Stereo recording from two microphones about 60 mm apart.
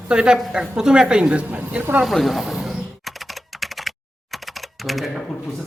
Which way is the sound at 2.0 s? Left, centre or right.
Centre.